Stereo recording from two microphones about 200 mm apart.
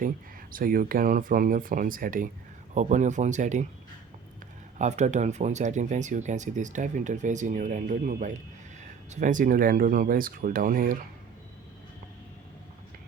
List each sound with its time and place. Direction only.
0.5 s speech: 45° right (ahead or behind)
4.8 s speech: 35° right (ahead or behind)